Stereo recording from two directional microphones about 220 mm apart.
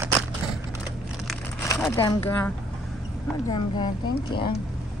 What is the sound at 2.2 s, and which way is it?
Speech, 10° left (ahead or behind).